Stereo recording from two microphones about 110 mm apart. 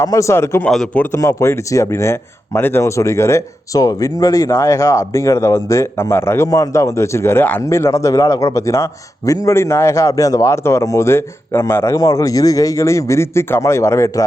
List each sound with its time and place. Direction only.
0.0 s speech: 25° left (ahead or behind)
0.6 s a man's voice: 5° left (ahead or behind)
1.1 s speech: 25° left (ahead or behind)